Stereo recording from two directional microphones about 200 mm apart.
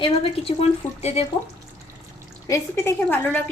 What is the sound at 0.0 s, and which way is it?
Speech, 30° left (ahead or behind).